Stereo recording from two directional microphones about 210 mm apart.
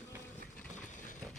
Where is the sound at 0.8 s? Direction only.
40° left (ahead or behind).